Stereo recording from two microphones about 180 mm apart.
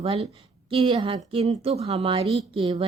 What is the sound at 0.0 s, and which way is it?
A woman's voice, 35° right (ahead or behind).